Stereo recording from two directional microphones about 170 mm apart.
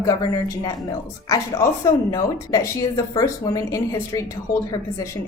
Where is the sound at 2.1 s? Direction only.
20° left (ahead or behind).